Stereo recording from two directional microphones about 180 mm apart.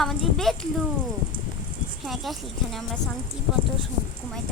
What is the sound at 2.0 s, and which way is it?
Speech, centre (ahead or behind).